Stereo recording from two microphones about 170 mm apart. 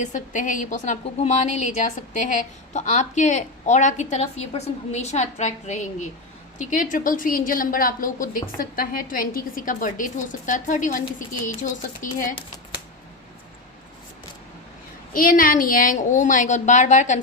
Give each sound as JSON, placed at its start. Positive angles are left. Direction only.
{"t": 0.0, "sound": "a woman's voice", "side_deg": 50}
{"t": 15.1, "sound": "a woman's voice", "side_deg": 55}